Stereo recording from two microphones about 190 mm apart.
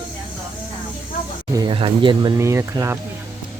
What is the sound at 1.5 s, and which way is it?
Speech, 20° right (ahead or behind).